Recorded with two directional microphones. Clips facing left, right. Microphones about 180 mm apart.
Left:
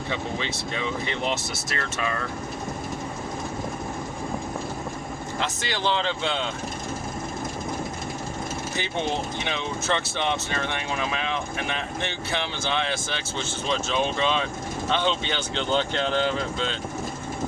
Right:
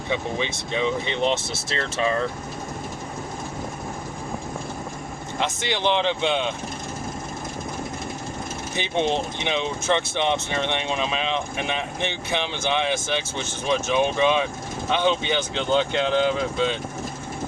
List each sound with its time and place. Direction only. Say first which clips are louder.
0.1 s speech: right 5 dB; 20° right (ahead or behind)
5.4 s speech: right 4 dB; 20° right (ahead or behind)
8.8 s speech: right 6 dB; 20° right (ahead or behind)